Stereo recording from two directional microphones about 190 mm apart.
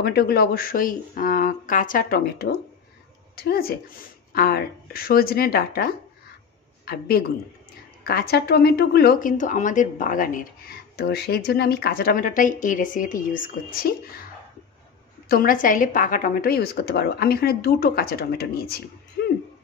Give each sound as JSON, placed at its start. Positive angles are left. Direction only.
{"t": 0.0, "sound": "speech", "side_deg": 55}
{"t": 15.2, "sound": "speech", "side_deg": 50}